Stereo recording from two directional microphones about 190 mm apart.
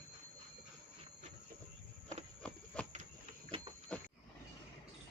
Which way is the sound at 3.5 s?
30° right (ahead or behind).